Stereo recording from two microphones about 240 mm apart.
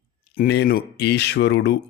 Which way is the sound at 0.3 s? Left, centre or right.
Left.